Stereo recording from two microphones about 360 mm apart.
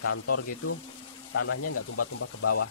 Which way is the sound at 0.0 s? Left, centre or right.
Left.